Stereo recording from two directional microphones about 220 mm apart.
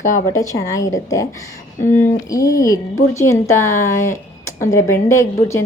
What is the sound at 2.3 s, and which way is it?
Speech, 15° left (ahead or behind).